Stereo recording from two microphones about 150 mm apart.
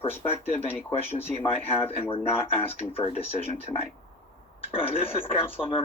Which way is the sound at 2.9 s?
40° left (ahead or behind).